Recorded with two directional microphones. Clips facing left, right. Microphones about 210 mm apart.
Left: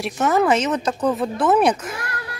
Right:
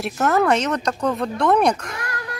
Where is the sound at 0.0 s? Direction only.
Centre (ahead or behind).